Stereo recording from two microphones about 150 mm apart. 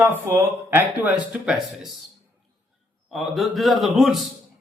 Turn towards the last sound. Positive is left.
turn(degrees=0)  # may be behind; listen again after turning